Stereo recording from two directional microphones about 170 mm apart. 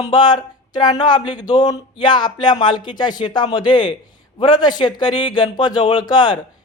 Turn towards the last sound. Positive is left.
turn(degrees=25)  # may be behind; listen again after turning